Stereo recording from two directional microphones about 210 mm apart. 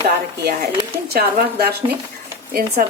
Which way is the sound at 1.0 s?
50° right (ahead or behind).